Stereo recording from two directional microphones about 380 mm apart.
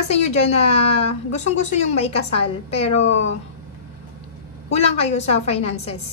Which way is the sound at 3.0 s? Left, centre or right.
Left.